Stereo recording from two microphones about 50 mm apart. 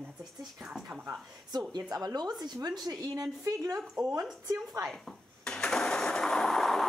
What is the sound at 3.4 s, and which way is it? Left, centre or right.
Speech, right.